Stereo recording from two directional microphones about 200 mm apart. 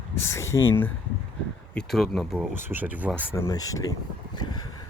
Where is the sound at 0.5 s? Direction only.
10° left (ahead or behind).